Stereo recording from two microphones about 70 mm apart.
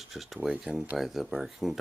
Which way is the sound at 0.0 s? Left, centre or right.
Centre.